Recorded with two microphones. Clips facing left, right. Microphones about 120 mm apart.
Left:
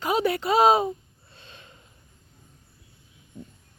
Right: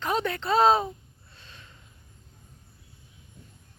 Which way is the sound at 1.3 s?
20° left (ahead or behind).